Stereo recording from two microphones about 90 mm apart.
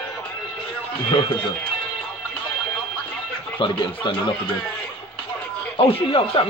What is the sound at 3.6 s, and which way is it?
Speech, 70° left (ahead or behind).